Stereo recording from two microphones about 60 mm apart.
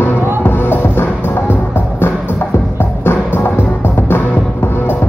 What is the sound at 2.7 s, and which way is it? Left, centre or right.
Music, left.